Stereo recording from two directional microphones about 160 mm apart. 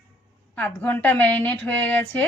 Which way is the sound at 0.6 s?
10° left (ahead or behind).